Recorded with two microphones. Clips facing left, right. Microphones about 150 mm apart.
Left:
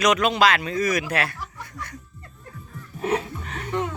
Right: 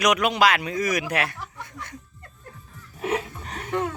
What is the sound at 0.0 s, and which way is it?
Speech, 15° right (ahead or behind).